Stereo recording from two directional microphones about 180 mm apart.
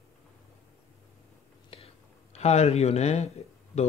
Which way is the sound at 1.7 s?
35° left (ahead or behind).